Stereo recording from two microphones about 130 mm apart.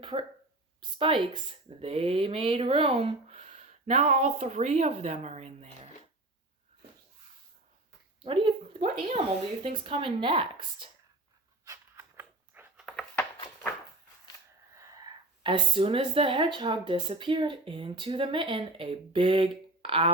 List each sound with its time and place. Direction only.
0.0 s speech: 40° right (ahead or behind)
3.3 s speech: 65° right (ahead or behind)
8.2 s a woman's voice: 40° right (ahead or behind)
11.9 s biting: 15° right (ahead or behind)
14.8 s whispering: 25° right (ahead or behind)
15.4 s speech: 40° right (ahead or behind)